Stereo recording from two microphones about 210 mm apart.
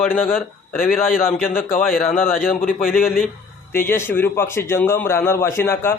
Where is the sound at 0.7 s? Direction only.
45° left (ahead or behind).